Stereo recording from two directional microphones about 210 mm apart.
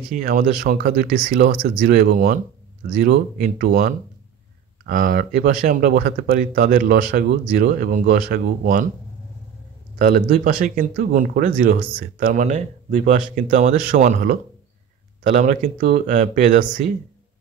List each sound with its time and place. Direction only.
0.1 s speech: 40° right (ahead or behind)
9.9 s speech: 45° right (ahead or behind)